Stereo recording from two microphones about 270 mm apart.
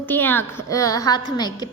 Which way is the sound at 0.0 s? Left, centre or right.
Centre.